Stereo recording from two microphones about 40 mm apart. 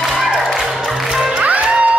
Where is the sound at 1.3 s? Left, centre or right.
Right.